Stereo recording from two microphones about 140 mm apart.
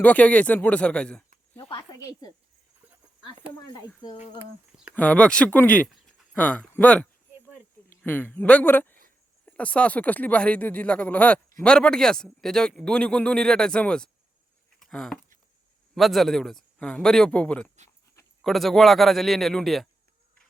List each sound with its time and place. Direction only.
0.0 s speech: 10° left (ahead or behind)
1.7 s a woman's voice: 30° left (ahead or behind)
3.6 s speech: 30° left (ahead or behind)
4.9 s a man's voice: 10° left (ahead or behind)
14.8 s a sound: 5° left (ahead or behind)
16.0 s a man's voice: centre (ahead or behind)